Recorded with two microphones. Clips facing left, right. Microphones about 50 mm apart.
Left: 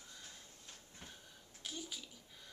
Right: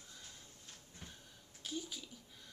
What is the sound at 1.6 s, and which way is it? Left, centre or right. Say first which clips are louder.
Speech: right 3 dB; centre.